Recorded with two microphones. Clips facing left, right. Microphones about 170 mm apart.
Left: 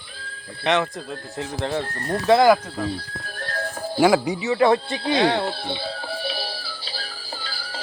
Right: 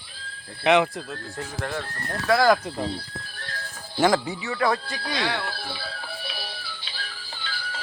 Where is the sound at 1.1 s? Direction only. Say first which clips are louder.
Left 4 dB; 20° left (ahead or behind).